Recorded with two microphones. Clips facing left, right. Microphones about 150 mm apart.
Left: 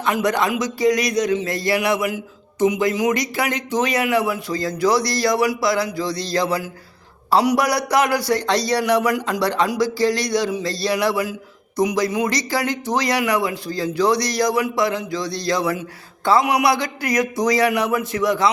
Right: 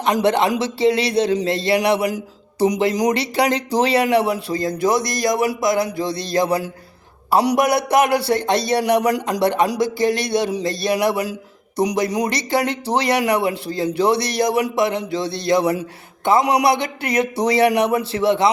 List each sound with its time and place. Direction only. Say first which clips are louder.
0.1 s speech: right 3 dB; 30° right (ahead or behind)